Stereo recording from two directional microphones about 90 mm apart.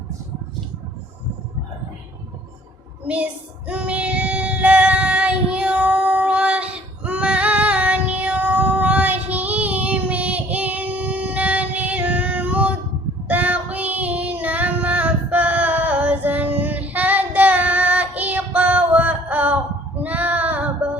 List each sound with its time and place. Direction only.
3.7 s child singing: 15° right (ahead or behind)